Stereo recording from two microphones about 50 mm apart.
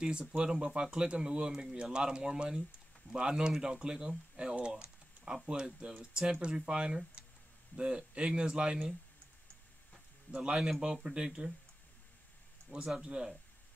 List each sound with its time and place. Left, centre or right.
0.0 s speech: centre
4.6 s typing: right
5.4 s speech: right
10.3 s speech: centre
12.6 s speech: centre